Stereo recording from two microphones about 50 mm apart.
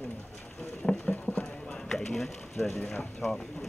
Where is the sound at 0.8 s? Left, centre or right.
Centre.